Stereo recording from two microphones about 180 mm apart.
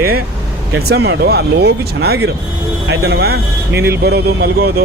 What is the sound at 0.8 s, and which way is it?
Speech, 65° right (ahead or behind).